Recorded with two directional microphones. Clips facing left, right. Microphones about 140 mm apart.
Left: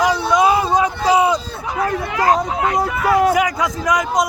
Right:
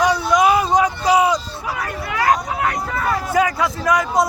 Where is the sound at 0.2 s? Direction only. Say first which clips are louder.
Left 1 dB; 25° left (ahead or behind).